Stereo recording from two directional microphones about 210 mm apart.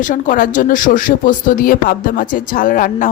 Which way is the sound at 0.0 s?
40° left (ahead or behind).